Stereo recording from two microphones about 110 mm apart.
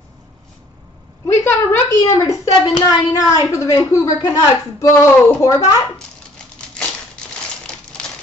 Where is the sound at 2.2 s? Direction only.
30° left (ahead or behind).